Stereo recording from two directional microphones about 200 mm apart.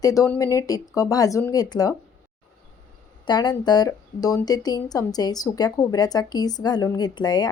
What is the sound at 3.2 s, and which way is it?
Speech, 20° left (ahead or behind).